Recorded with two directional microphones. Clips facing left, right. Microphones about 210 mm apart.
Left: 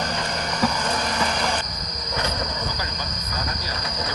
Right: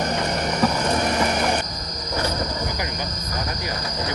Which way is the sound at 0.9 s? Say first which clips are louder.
Right 4 dB; 20° right (ahead or behind).